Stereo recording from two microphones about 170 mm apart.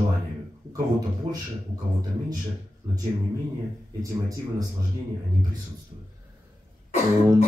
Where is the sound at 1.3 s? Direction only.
30° right (ahead or behind).